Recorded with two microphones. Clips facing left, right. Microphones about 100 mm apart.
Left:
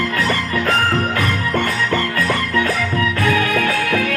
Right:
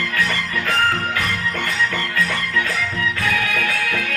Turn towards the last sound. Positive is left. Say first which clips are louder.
# left 5 dB
turn(degrees=45)  # may be behind; listen again after turning